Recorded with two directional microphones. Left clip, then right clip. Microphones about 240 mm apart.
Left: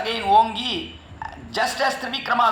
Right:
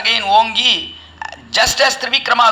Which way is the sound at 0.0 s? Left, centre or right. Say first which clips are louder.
Right 5 dB; right.